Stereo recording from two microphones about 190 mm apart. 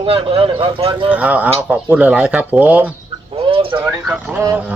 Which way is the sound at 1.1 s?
5° right (ahead or behind).